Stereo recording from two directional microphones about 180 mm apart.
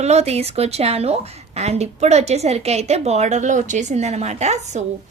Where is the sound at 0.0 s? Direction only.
35° right (ahead or behind).